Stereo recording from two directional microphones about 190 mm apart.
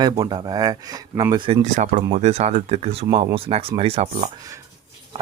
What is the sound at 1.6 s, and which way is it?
Speech, 40° right (ahead or behind).